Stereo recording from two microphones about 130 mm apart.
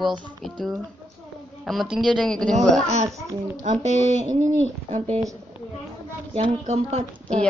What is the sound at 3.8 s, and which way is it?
Speech, 60° right (ahead or behind).